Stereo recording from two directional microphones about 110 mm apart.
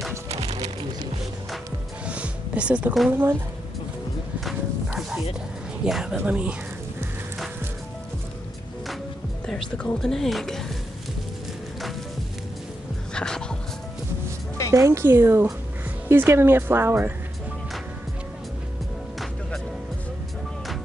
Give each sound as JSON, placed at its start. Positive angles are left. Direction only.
{"t": 0.3, "sound": "music", "side_deg": -75}
{"t": 2.0, "sound": "music", "side_deg": -10}
{"t": 3.1, "sound": "speech", "side_deg": -20}
{"t": 4.5, "sound": "bow-wow", "side_deg": -5}
{"t": 5.9, "sound": "a woman's voice", "side_deg": 0}
{"t": 9.5, "sound": "speech", "side_deg": 5}
{"t": 13.1, "sound": "music", "side_deg": 5}
{"t": 14.7, "sound": "speech", "side_deg": -25}